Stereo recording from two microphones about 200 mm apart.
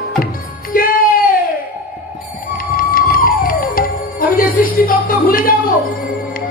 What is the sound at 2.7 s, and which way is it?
Music, 45° left (ahead or behind).